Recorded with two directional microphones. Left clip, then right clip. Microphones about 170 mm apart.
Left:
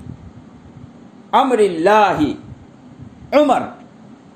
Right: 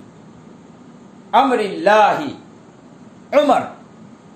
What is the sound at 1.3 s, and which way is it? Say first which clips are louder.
Speech: left 1 dB; 40° left (ahead or behind).